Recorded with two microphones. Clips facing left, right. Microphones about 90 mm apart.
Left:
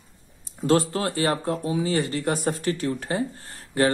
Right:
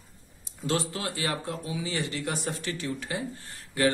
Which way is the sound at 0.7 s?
45° left (ahead or behind).